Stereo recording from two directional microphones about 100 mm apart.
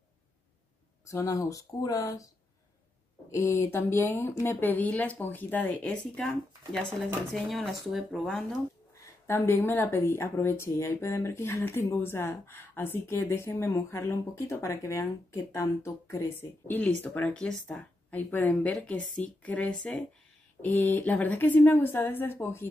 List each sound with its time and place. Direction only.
1.0 s speech: 30° left (ahead or behind); by 8.5 s 5° left (ahead or behind)
9.3 s speech: 25° left (ahead or behind)